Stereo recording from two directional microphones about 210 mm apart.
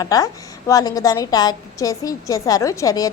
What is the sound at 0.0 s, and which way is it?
A woman's voice, 15° left (ahead or behind).